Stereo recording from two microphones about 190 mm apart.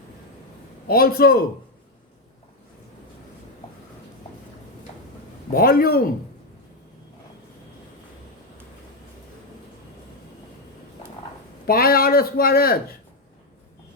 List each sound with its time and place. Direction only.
0.9 s speech: 50° left (ahead or behind)
5.5 s speech: 50° left (ahead or behind)
11.6 s speech: 50° left (ahead or behind)